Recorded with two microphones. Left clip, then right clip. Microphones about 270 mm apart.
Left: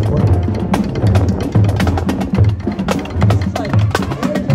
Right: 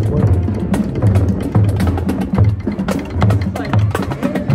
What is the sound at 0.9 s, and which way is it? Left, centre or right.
Music, centre.